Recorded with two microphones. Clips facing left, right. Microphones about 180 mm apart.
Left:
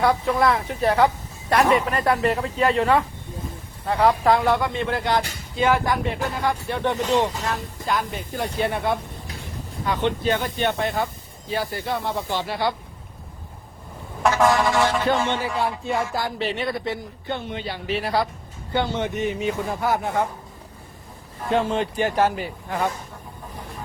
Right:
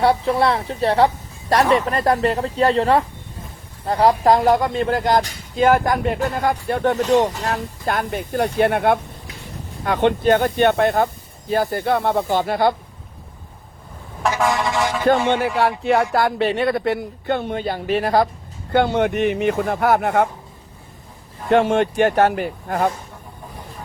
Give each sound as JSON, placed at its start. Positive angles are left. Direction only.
{"t": 0.0, "sound": "speech", "side_deg": -30}
{"t": 15.1, "sound": "music", "side_deg": -45}
{"t": 15.5, "sound": "speech", "side_deg": -80}
{"t": 18.7, "sound": "speech", "side_deg": -60}
{"t": 21.5, "sound": "speech", "side_deg": -75}